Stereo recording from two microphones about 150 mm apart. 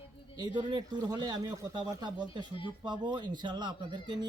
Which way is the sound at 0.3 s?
30° right (ahead or behind).